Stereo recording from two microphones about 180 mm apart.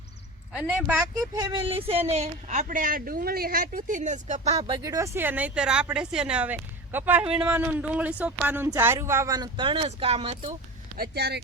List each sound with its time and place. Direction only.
1.4 s speech: 25° right (ahead or behind)
4.6 s speech: 20° right (ahead or behind)
10.9 s speech: 60° right (ahead or behind)